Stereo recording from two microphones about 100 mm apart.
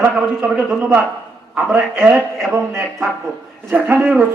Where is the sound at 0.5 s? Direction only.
20° right (ahead or behind).